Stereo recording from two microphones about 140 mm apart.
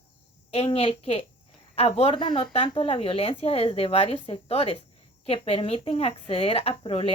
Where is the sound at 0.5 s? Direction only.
45° left (ahead or behind).